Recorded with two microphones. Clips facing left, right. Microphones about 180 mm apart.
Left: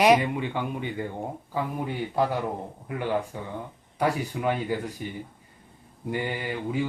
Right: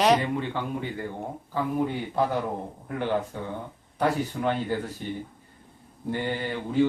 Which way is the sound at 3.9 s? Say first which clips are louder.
Right 1 dB; 10° left (ahead or behind).